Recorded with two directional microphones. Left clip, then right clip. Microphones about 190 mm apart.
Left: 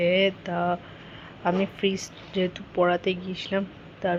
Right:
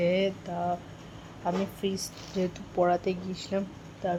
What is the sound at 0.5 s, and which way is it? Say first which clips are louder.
Speech: left 4 dB; 15° left (ahead or behind).